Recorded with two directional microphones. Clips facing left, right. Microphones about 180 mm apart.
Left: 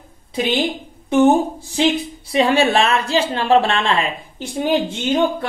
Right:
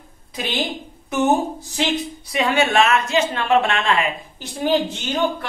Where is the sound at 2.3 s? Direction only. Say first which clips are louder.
Left 3 dB; 30° left (ahead or behind).